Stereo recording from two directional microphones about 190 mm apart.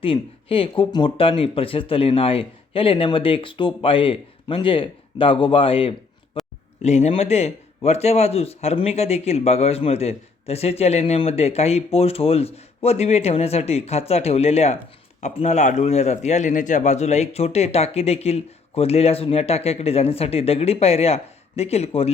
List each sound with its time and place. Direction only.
0.0 s a man's voice: 30° left (ahead or behind)